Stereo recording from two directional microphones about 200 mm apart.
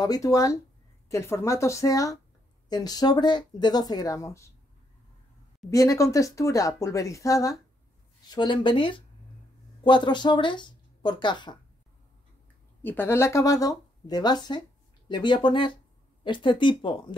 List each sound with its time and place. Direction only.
0.0 s speech: 15° left (ahead or behind)
5.7 s speech: 15° left (ahead or behind)
12.8 s speech: 10° left (ahead or behind)